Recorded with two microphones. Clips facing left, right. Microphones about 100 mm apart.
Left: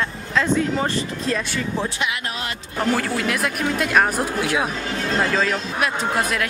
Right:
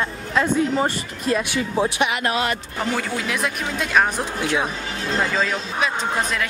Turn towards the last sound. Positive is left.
turn(degrees=5)  # may be behind; listen again after turning